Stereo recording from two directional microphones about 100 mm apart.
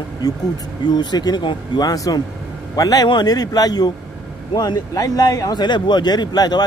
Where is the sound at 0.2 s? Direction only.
40° left (ahead or behind).